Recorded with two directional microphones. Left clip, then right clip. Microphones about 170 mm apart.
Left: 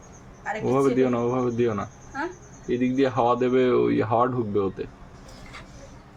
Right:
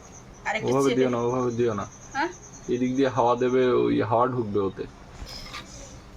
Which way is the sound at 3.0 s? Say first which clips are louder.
Even; 20° left (ahead or behind).